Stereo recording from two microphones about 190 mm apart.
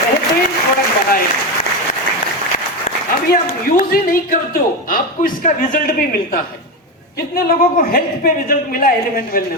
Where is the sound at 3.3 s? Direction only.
50° left (ahead or behind).